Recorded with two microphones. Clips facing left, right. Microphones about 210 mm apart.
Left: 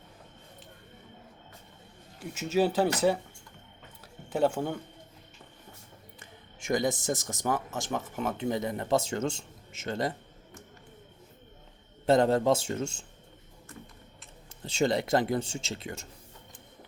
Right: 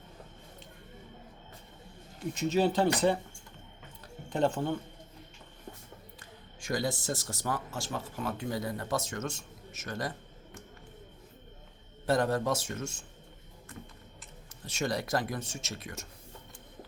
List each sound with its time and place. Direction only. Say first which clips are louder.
2.3 s speech: left 1 dB; 5° left (ahead or behind)
4.3 s speech: left 2 dB; 10° left (ahead or behind)
6.6 s speech: left 4 dB; 20° left (ahead or behind)
12.0 s speech: left 5 dB; 25° left (ahead or behind)
14.6 s speech: left 6 dB; 25° left (ahead or behind)